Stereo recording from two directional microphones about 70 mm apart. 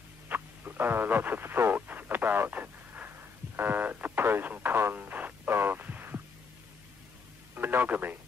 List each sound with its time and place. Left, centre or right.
0.3 s radio: right
7.5 s speech: right